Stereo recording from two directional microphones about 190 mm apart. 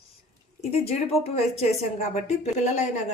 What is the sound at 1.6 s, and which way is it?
Speech, 35° left (ahead or behind).